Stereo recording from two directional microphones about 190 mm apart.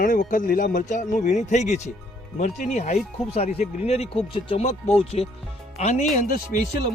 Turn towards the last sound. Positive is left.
turn(degrees=45)  # may be behind; listen again after turning